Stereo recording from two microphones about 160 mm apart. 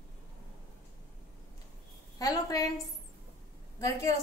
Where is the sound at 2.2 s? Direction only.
20° left (ahead or behind).